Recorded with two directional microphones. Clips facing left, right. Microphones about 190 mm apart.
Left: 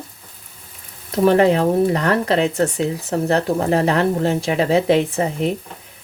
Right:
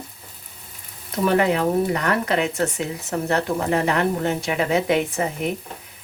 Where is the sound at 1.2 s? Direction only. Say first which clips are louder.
Left 5 dB; 35° left (ahead or behind).